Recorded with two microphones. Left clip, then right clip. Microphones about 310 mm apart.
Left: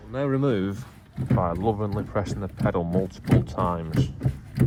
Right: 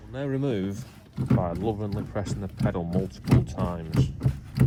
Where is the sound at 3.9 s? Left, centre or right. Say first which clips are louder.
Left 1 dB; centre.